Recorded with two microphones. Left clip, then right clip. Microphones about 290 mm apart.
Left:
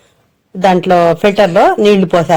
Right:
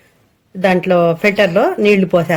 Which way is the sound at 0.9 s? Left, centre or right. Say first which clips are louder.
Left 4 dB; left.